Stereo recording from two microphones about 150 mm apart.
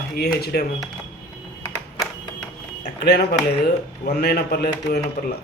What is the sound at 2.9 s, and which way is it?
Speech, 90° left.